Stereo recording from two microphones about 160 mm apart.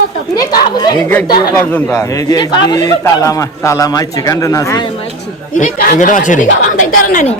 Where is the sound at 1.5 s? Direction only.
15° left (ahead or behind).